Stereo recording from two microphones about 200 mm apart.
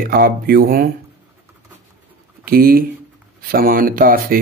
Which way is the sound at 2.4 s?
50° right (ahead or behind).